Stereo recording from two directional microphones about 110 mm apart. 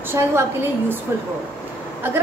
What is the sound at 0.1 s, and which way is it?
Speech, 25° right (ahead or behind).